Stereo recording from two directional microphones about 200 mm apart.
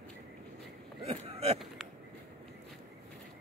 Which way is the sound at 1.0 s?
30° right (ahead or behind).